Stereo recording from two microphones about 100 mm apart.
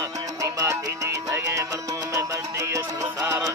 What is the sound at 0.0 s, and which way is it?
Music, 35° right (ahead or behind).